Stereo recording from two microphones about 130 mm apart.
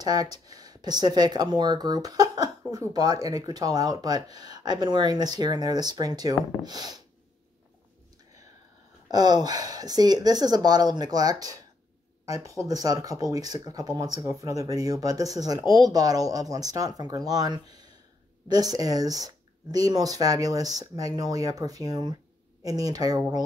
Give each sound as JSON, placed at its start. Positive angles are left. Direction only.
{"t": 0.0, "sound": "speech", "side_deg": -30}
{"t": 9.1, "sound": "speech", "side_deg": -30}